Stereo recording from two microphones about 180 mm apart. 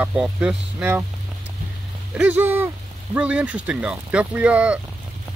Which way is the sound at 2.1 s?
5° right (ahead or behind).